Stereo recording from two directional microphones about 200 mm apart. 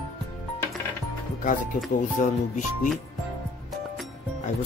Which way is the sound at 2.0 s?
40° left (ahead or behind).